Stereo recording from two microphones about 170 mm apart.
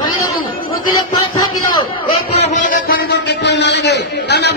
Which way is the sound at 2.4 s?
50° left (ahead or behind).